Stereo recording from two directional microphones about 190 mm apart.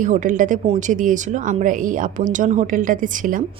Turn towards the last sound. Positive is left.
turn(degrees=-45)  # may be behind; listen again after turning